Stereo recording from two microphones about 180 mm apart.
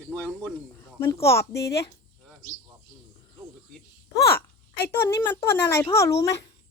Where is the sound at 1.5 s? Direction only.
65° left (ahead or behind).